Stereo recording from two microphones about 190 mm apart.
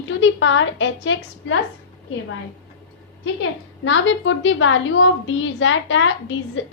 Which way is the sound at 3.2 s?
80° left.